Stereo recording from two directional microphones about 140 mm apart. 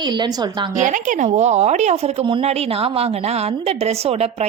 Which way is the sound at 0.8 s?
65° right (ahead or behind).